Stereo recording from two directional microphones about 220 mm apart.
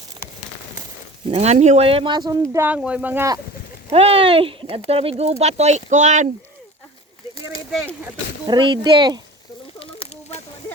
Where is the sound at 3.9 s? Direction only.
25° right (ahead or behind).